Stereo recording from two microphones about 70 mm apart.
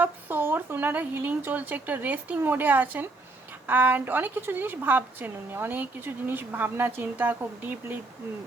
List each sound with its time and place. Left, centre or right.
0.0 s a woman's voice: right